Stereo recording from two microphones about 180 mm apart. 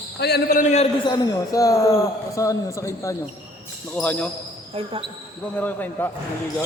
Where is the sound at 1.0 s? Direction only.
20° left (ahead or behind).